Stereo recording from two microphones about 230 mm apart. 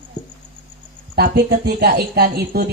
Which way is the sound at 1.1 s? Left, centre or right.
Right.